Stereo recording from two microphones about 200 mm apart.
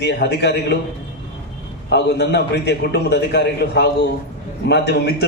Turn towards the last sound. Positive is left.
turn(degrees=55)  # may be behind; listen again after turning